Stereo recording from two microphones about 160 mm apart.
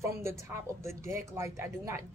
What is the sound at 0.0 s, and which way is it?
Speech, 15° right (ahead or behind).